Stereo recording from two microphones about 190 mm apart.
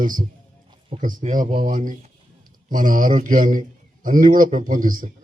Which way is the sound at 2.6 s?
45° right (ahead or behind).